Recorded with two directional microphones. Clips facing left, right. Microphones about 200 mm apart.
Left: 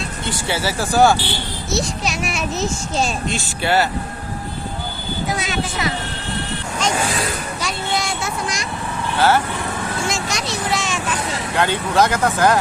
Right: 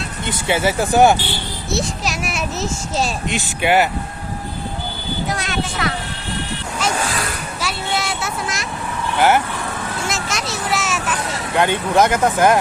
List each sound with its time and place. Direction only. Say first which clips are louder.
0.3 s speech: right 4 dB; 20° right (ahead or behind)
1.7 s a child's voice: even; centre (ahead or behind)
3.2 s speech: right 2 dB; 15° right (ahead or behind)
5.3 s a child's voice: left 2 dB; centre (ahead or behind)
7.6 s a sound: right 1 dB; centre (ahead or behind)
9.1 s speech: right 1 dB; 15° right (ahead or behind)
10.1 s vehicle: left 1 dB; centre (ahead or behind)
11.5 s speech: right 2 dB; 20° right (ahead or behind)